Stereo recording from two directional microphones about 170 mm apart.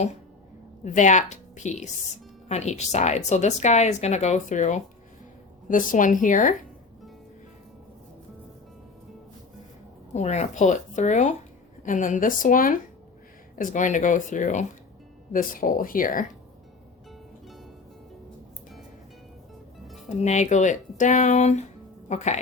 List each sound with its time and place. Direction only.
0.9 s a woman's voice: 45° left (ahead or behind)
10.2 s a woman's voice: 40° left (ahead or behind)
20.1 s a woman's voice: 40° left (ahead or behind)